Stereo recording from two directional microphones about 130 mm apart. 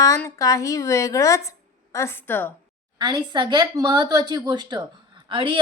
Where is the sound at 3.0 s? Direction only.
35° right (ahead or behind).